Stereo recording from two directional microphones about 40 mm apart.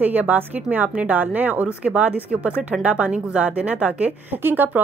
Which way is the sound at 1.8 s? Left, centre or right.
Right.